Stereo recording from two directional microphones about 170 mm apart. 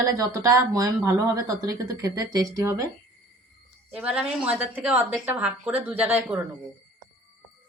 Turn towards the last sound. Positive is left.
turn(degrees=-10)  # may be behind; listen again after turning